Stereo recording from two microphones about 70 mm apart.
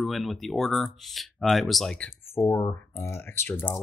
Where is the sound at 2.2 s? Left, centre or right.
Left.